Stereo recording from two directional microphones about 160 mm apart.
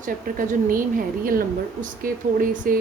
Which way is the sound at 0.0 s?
55° right (ahead or behind).